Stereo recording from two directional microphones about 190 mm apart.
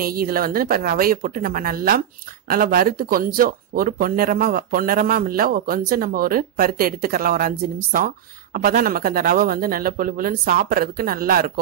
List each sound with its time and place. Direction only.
0.0 s speech: 50° right (ahead or behind)